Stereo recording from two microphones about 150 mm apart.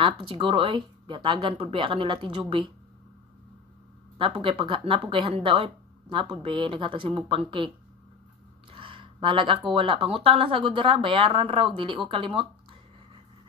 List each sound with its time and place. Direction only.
0.0 s speech: 35° right (ahead or behind)
4.2 s speech: 35° right (ahead or behind)
8.7 s a sound: 35° right (ahead or behind)
9.7 s speech: 35° right (ahead or behind)